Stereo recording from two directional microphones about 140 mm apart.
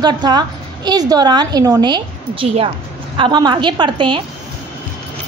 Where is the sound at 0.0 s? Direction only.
30° right (ahead or behind).